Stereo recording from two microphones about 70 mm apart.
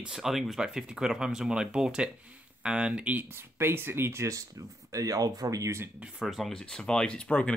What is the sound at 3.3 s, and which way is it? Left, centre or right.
Speech, right.